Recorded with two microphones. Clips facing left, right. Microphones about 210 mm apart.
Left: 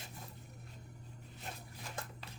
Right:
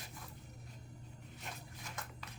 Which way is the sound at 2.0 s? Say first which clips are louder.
Left 4 dB; 30° left (ahead or behind).